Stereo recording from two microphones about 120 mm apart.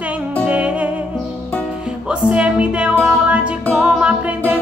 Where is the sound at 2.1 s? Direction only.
10° right (ahead or behind).